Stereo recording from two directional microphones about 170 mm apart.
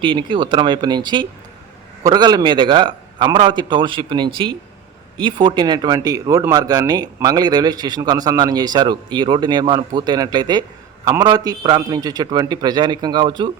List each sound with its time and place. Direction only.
0.0 s speech: 30° right (ahead or behind)